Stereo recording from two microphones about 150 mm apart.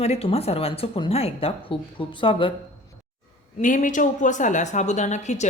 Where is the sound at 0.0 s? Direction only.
40° left (ahead or behind).